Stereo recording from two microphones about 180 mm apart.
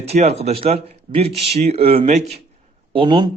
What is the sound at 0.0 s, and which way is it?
A man's voice, 35° right (ahead or behind).